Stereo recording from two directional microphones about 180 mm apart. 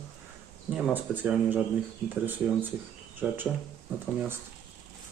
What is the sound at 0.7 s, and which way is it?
Speech, 10° right (ahead or behind).